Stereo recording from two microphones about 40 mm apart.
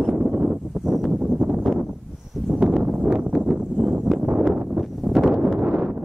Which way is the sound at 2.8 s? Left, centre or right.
Right.